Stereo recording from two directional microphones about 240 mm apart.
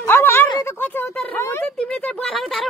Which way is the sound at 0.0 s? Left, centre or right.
Centre.